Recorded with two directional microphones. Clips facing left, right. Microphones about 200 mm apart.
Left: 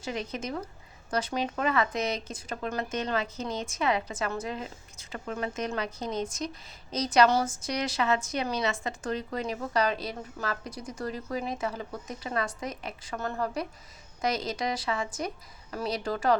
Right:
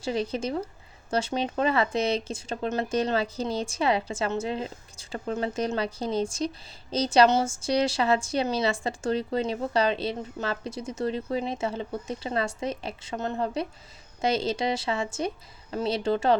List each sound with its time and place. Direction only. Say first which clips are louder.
0.0 s a woman's voice: right 6 dB; 30° right (ahead or behind)